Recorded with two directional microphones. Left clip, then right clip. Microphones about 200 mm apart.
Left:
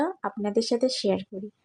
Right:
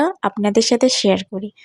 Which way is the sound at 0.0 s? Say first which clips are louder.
Right 10 dB; 35° right (ahead or behind).